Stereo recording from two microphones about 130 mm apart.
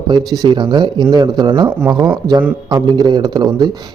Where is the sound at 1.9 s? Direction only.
15° right (ahead or behind).